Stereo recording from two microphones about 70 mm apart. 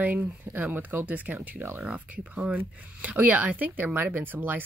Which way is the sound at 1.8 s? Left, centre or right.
Centre.